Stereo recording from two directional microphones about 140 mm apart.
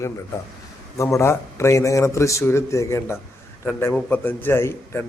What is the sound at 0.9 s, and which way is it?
A man's voice, 20° left (ahead or behind).